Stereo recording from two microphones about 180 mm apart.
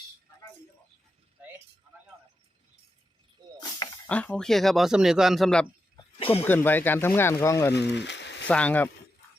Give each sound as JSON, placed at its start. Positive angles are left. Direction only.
{"t": 4.0, "sound": "speech", "side_deg": 10}
{"t": 6.1, "sound": "speech", "side_deg": 30}
{"t": 6.4, "sound": "speech", "side_deg": 10}
{"t": 7.7, "sound": "a sound", "side_deg": 70}
{"t": 8.4, "sound": "speech", "side_deg": 5}